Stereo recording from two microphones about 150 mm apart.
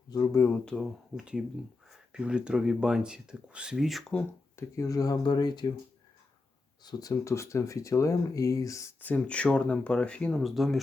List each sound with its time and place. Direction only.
0.1 s speech: 20° left (ahead or behind)
0.6 s speech: 5° left (ahead or behind)
1.2 s speech: 5° right (ahead or behind)
4.5 s speech: 20° left (ahead or behind)
6.8 s speech: 20° left (ahead or behind); by 10.8 s centre (ahead or behind)